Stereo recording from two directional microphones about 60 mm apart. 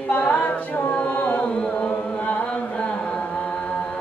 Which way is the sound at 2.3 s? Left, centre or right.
Centre.